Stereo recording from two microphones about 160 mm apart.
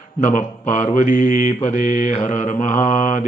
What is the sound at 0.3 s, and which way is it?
Speech, 50° left (ahead or behind).